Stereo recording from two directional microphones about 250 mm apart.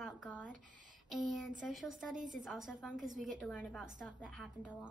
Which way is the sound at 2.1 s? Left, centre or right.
Right.